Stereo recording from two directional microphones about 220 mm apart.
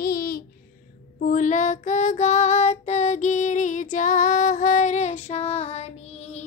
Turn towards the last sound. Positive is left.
turn(degrees=30)  # may be behind; listen again after turning